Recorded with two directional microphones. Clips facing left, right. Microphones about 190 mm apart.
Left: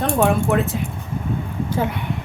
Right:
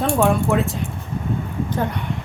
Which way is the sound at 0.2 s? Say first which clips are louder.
Left 2 dB; centre (ahead or behind).